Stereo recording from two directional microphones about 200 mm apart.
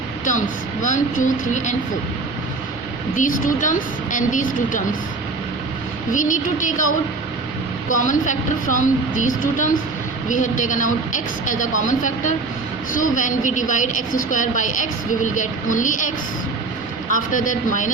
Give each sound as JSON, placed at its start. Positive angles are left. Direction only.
{"t": 0.3, "sound": "a woman's voice", "side_deg": 40}
{"t": 3.2, "sound": "a woman's voice", "side_deg": 40}
{"t": 6.1, "sound": "a woman's voice", "side_deg": 40}